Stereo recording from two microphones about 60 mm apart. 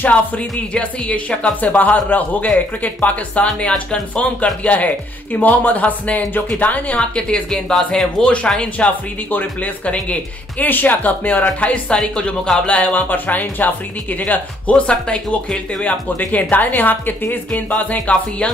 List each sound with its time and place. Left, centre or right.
0.0 s speech: left
7.0 s a woman's voice: centre